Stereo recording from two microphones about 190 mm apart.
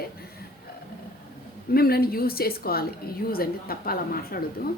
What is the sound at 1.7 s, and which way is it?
A woman's voice, 55° left (ahead or behind).